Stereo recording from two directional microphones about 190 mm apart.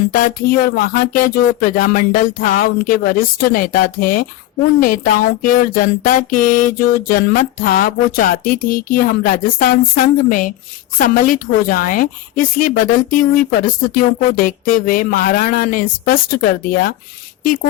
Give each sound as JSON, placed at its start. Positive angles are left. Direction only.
{"t": 0.1, "sound": "a woman's voice", "side_deg": 50}